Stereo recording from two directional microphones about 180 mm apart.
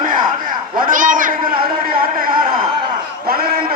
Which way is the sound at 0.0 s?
50° right (ahead or behind).